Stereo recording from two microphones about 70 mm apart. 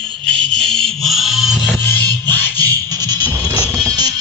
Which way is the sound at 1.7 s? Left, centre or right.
Left.